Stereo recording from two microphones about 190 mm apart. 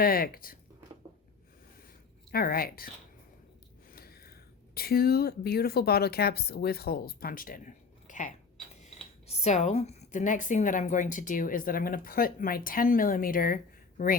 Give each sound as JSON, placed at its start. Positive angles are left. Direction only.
{"t": 0.0, "sound": "a woman's voice", "side_deg": 50}
{"t": 2.3, "sound": "a woman's voice", "side_deg": 50}
{"t": 3.9, "sound": "speech", "side_deg": 55}
{"t": 9.4, "sound": "a woman's voice", "side_deg": 40}